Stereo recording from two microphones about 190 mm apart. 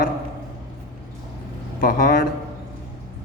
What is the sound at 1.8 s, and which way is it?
Speech, 50° left (ahead or behind).